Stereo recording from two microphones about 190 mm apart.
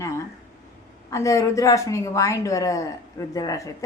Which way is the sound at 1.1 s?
15° left (ahead or behind).